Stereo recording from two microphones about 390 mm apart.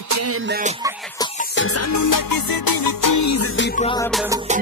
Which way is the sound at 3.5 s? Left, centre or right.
Left.